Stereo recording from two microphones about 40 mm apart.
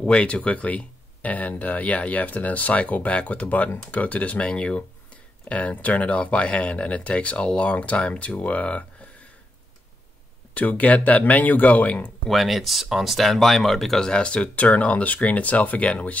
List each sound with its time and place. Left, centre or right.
0.0 s speech: left
10.5 s speech: left
12.3 s speech: centre
14.0 s speech: left